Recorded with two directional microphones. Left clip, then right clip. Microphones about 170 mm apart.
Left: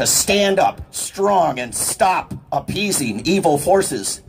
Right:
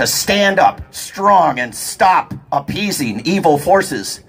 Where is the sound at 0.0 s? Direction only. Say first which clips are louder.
Right 3 dB; 35° left (ahead or behind).